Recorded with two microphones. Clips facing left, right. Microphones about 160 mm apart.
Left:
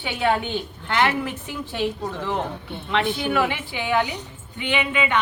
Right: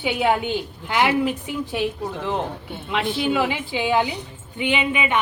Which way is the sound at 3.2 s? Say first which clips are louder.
Right 1 dB; 20° right (ahead or behind).